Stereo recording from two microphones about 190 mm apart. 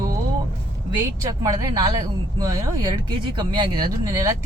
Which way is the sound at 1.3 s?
20° right (ahead or behind).